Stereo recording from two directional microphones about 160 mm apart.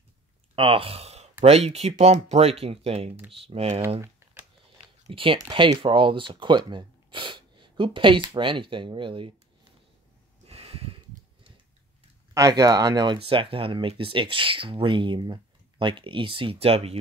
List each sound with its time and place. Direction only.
0.6 s speech: 35° right (ahead or behind)
4.0 s typing: 15° right (ahead or behind)
5.0 s speech: 35° right (ahead or behind)
10.4 s a sound: 40° right (ahead or behind)
12.4 s speech: 25° right (ahead or behind); by 17.0 s 40° right (ahead or behind)